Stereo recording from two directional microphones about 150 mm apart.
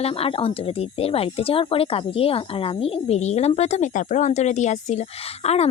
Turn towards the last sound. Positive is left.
turn(degrees=45)  # may be behind; listen again after turning